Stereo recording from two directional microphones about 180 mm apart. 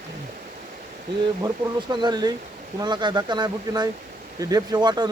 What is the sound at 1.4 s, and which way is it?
Speech, 25° right (ahead or behind).